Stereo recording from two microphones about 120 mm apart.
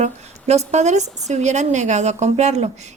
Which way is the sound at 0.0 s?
70° right (ahead or behind).